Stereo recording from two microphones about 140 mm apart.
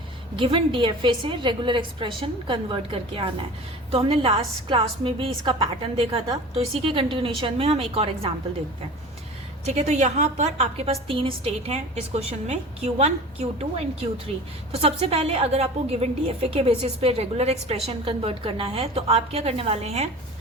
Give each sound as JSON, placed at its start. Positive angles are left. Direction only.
{"t": 0.3, "sound": "a woman's voice", "side_deg": -35}
{"t": 9.6, "sound": "a woman's voice", "side_deg": -55}